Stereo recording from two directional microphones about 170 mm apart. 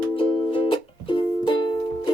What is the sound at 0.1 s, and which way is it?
Music, 30° left (ahead or behind).